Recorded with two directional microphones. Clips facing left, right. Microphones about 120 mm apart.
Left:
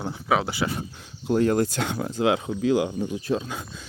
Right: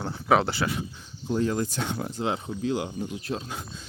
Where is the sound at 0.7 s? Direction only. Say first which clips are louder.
Even; 60° left (ahead or behind); by 2.5 s 90° left.